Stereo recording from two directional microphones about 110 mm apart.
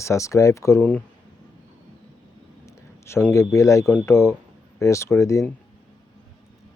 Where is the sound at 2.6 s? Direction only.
25° left (ahead or behind).